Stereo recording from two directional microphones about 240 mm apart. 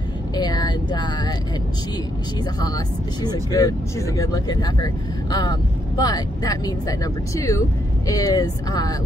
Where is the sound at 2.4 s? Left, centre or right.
Centre.